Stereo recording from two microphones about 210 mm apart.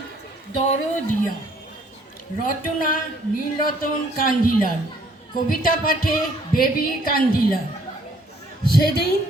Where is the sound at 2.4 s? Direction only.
40° left (ahead or behind).